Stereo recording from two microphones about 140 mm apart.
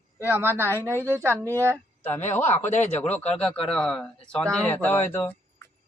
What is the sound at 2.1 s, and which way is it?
Speech, 55° left (ahead or behind).